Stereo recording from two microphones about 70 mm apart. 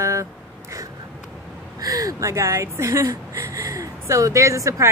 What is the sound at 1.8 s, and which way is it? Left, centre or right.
Speech, right.